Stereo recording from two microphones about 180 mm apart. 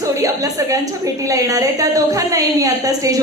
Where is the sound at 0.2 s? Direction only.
20° right (ahead or behind).